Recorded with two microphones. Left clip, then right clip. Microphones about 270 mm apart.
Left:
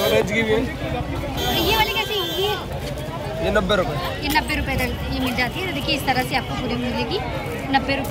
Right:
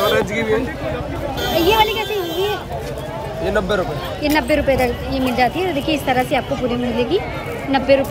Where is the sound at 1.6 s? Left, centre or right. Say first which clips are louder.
Right 6 dB; centre.